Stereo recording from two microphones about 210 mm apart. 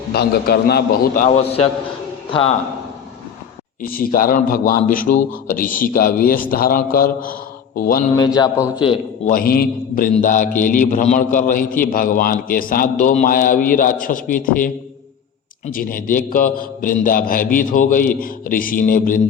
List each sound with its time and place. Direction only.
0.1 s a man's voice: 50° left (ahead or behind); by 1.6 s 30° left (ahead or behind)
3.8 s a man's voice: 45° left (ahead or behind)
8.1 s a man's voice: 20° left (ahead or behind)
9.2 s a man's voice: 45° left (ahead or behind)